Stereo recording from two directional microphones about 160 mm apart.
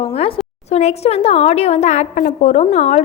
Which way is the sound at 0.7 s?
45° left (ahead or behind).